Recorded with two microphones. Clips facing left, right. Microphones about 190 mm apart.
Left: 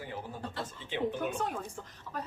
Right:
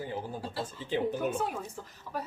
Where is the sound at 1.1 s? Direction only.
5° right (ahead or behind).